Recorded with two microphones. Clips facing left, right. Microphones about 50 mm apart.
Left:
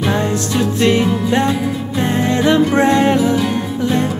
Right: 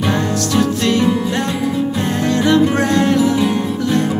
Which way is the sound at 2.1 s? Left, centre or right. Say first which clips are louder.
Even; left.